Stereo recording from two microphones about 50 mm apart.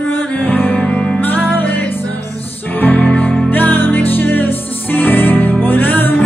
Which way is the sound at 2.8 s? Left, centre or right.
Left.